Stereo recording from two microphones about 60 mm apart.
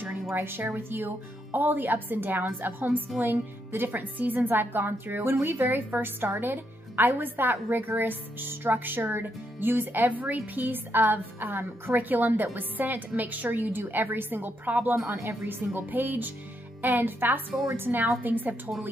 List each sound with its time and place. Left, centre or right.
0.3 s a woman's voice: right